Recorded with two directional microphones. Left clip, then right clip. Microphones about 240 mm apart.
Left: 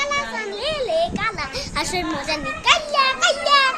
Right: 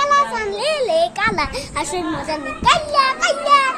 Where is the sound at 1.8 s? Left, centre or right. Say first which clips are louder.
Right 1 dB; centre.